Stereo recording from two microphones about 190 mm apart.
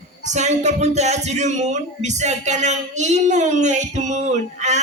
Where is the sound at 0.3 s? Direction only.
35° right (ahead or behind).